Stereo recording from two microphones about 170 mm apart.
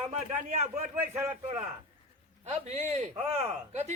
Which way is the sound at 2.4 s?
40° right (ahead or behind).